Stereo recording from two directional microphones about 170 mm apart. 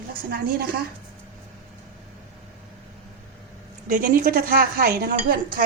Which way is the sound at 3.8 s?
55° right (ahead or behind).